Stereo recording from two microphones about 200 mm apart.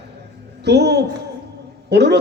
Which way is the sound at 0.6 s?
55° right (ahead or behind).